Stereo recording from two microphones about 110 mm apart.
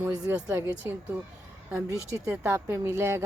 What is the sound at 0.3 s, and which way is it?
Speech, 15° right (ahead or behind).